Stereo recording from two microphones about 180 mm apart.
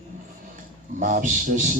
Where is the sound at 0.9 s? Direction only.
45° right (ahead or behind).